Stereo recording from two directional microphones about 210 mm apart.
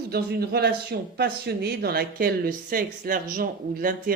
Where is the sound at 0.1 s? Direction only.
50° right (ahead or behind).